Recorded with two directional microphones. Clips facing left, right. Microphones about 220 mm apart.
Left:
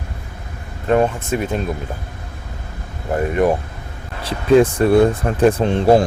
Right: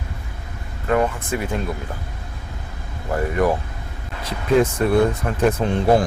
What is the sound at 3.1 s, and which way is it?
Speech, 25° left (ahead or behind).